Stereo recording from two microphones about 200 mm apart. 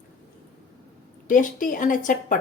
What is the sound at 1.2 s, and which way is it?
A woman's voice, 40° left (ahead or behind).